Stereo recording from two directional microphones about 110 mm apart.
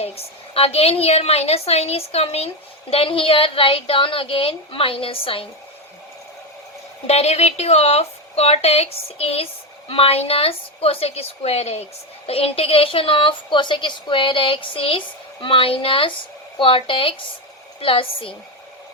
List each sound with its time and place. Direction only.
0.5 s a woman's voice: 60° left (ahead or behind)
2.9 s a woman's voice: 55° left (ahead or behind)
7.1 s a woman's voice: 75° left (ahead or behind)
12.2 s a woman's voice: 60° left (ahead or behind)